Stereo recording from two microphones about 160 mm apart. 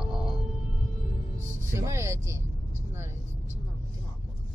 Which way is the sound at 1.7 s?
20° right (ahead or behind).